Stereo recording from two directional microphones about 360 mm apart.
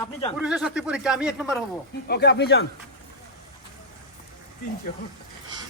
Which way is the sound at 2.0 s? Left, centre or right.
Left.